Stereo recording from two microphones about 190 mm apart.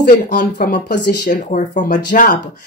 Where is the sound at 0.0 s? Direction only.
45° left (ahead or behind).